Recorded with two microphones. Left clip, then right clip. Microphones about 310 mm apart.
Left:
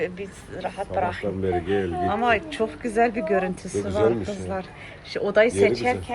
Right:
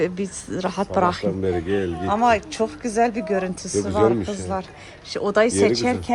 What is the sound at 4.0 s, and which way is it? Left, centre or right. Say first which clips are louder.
Speech: right 3 dB; right.